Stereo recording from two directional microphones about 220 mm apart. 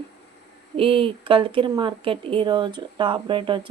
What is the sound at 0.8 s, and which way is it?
Speech, 25° right (ahead or behind).